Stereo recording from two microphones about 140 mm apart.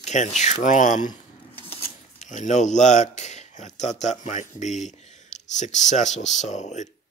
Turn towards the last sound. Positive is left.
turn(degrees=55)  # may be behind; listen again after turning